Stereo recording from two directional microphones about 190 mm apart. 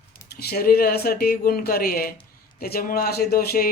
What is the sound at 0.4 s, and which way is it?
Speech, 55° left (ahead or behind).